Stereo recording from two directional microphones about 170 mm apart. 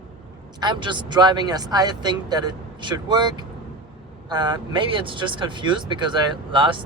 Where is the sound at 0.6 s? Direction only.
30° right (ahead or behind).